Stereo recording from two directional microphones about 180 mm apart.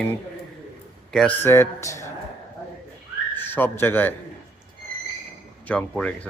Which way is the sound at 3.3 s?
10° left (ahead or behind).